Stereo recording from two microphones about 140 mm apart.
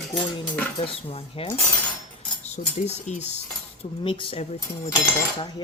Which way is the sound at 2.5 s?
55° left (ahead or behind).